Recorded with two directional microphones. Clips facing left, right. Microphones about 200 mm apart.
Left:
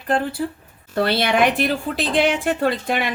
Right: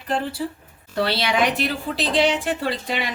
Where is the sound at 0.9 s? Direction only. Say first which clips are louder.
Left 3 dB; 50° left (ahead or behind).